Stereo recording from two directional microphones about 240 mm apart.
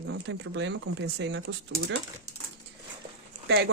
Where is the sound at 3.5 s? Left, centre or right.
Right.